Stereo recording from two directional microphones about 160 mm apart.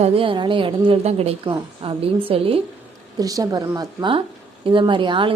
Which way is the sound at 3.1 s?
20° right (ahead or behind).